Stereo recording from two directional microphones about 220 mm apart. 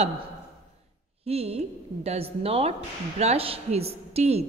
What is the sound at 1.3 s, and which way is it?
A woman's voice, 25° right (ahead or behind).